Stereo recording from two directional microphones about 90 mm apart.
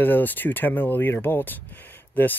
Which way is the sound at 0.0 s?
20° left (ahead or behind).